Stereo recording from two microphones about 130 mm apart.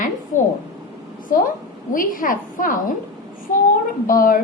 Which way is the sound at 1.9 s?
90° left.